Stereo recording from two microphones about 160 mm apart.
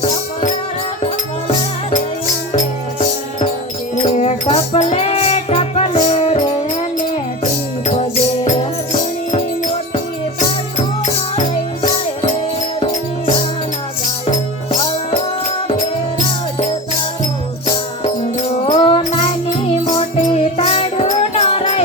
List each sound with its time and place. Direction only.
3.9 s music: 45° left (ahead or behind)
8.4 s music: 45° left (ahead or behind)
11.3 s music: 35° left (ahead or behind)
15.1 s music: 50° left (ahead or behind)
18.0 s music: 40° left (ahead or behind)